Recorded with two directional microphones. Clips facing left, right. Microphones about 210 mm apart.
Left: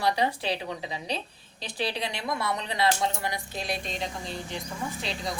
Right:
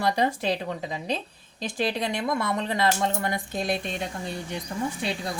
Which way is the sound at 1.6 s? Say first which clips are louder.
Right 4 dB; 45° right (ahead or behind).